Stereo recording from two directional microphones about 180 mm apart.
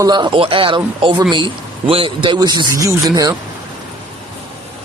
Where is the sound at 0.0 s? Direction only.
25° right (ahead or behind).